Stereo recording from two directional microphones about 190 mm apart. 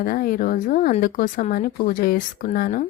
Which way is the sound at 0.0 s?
50° left (ahead or behind).